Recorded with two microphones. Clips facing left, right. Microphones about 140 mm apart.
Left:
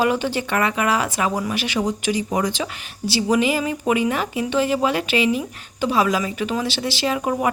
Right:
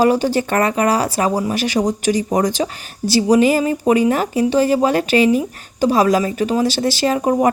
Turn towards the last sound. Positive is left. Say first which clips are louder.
# right 6 dB
turn(degrees=-35)  # may be behind; listen again after turning